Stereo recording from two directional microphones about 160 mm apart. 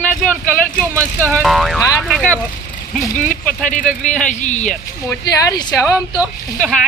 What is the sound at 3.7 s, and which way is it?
A man's voice, 55° left (ahead or behind).